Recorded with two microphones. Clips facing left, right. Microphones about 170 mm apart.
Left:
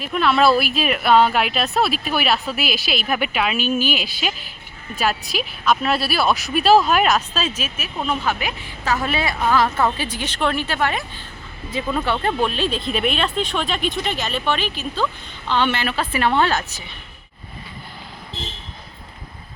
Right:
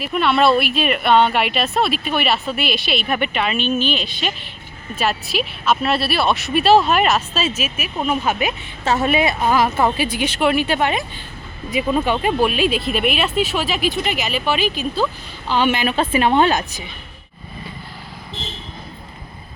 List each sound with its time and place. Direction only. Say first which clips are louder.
0.0 s a woman's voice: right 1 dB; centre (ahead or behind)